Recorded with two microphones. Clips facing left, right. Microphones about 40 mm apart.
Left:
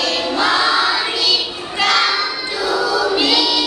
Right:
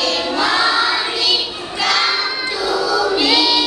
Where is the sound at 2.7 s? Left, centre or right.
Centre.